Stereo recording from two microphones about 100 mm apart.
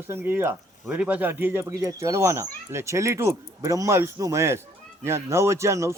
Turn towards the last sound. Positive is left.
turn(degrees=-30)  # may be behind; listen again after turning